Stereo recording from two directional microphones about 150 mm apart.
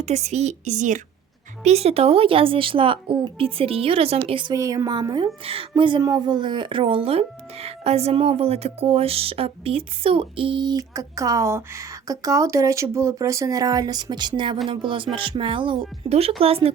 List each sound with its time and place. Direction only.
0.0 s a woman's voice: 45° right (ahead or behind)
1.6 s speech: 45° right (ahead or behind)
4.5 s a woman's voice: 20° right (ahead or behind); by 16.7 s 40° right (ahead or behind)